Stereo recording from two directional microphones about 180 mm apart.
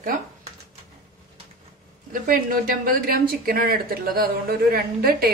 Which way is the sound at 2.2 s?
50° right (ahead or behind).